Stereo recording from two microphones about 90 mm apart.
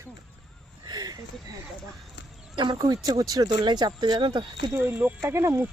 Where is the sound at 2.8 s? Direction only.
45° right (ahead or behind).